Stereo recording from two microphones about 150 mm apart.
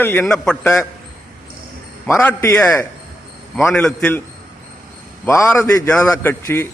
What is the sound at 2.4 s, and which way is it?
A man's voice, 15° left (ahead or behind).